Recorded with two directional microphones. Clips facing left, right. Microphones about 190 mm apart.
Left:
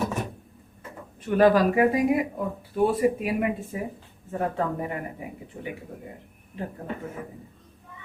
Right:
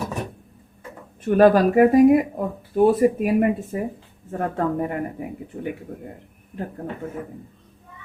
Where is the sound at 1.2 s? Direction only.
45° right (ahead or behind).